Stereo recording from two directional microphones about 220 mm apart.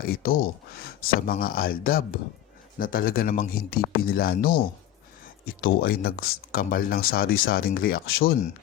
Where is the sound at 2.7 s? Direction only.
40° left (ahead or behind).